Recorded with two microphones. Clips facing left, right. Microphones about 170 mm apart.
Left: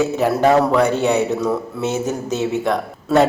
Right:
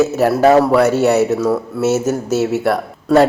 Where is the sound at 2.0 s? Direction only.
15° left (ahead or behind).